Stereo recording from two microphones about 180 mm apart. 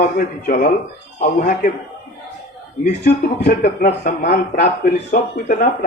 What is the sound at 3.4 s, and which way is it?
Speech, 60° left (ahead or behind).